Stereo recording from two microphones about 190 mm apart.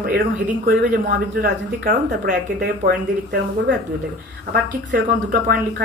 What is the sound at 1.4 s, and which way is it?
Speech, 50° right (ahead or behind).